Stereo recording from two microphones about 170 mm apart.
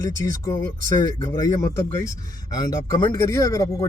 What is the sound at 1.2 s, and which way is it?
Speech, 20° left (ahead or behind).